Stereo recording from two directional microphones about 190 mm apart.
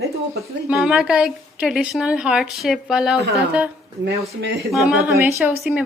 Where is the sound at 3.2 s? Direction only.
60° right (ahead or behind).